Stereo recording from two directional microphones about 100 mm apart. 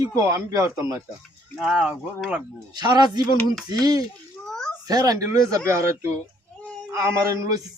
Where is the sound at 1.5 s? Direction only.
5° right (ahead or behind).